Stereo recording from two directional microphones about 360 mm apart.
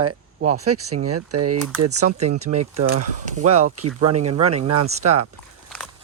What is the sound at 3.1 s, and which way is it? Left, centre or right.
Speech, right.